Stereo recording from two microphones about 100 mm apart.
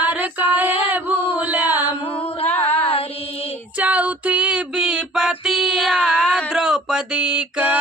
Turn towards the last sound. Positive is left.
turn(degrees=-10)  # may be behind; listen again after turning